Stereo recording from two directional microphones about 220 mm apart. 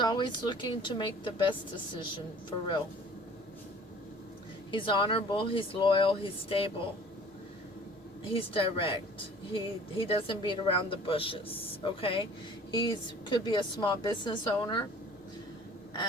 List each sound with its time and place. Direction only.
0.0 s speech: 20° left (ahead or behind)
4.7 s speech: 20° left (ahead or behind)
8.3 s speech: 25° left (ahead or behind)
13.3 s speech: 20° left (ahead or behind)